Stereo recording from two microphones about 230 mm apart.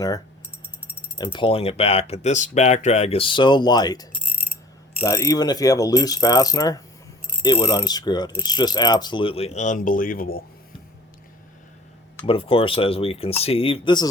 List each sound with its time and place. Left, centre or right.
1.2 s speech: left
5.0 s speech: centre; by 10.4 s left
12.2 s speech: left